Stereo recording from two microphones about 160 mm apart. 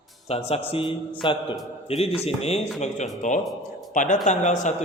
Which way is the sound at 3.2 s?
50° left (ahead or behind).